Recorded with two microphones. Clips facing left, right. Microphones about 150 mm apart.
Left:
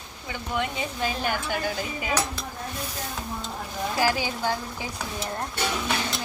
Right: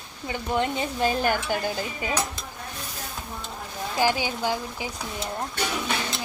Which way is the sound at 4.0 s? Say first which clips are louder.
Right 2 dB; 15° right (ahead or behind).